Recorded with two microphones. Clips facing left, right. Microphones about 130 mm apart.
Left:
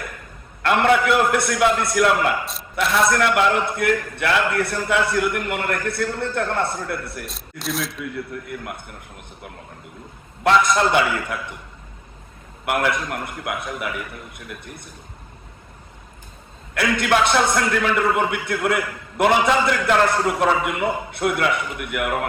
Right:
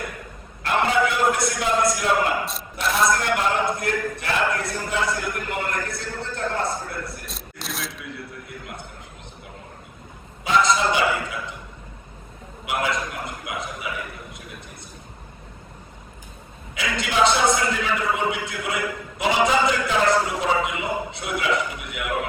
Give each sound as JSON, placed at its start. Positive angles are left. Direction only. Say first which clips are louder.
{"t": 0.6, "sound": "a man's voice", "louder": "left 4 dB", "side_deg": 65}
{"t": 2.4, "sound": "a man's voice", "louder": "left 3 dB", "side_deg": 0}
{"t": 3.1, "sound": "a man's voice", "louder": "left 4 dB", "side_deg": 65}
{"t": 7.3, "sound": "speech", "louder": "left 6 dB", "side_deg": 0}
{"t": 8.4, "sound": "a man's voice", "louder": "left 6 dB", "side_deg": 55}
{"t": 10.4, "sound": "a man's voice", "louder": "left 3 dB", "side_deg": 60}
{"t": 12.6, "sound": "a man's voice", "louder": "left 3 dB", "side_deg": 55}
{"t": 16.7, "sound": "a man's voice", "louder": "left 5 dB", "side_deg": 60}